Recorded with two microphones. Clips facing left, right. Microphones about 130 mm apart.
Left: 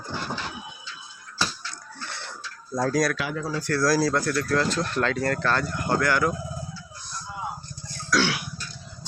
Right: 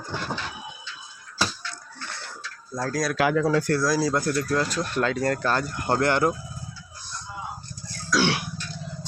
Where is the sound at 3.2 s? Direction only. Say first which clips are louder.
Right 8 dB; 70° right (ahead or behind).